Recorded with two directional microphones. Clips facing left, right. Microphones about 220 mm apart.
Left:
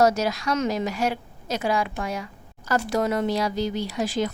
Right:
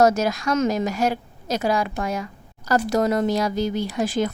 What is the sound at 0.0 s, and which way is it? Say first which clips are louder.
A woman's voice: right 3 dB; 50° right (ahead or behind).